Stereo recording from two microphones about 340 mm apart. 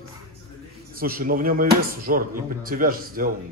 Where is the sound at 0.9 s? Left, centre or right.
Right.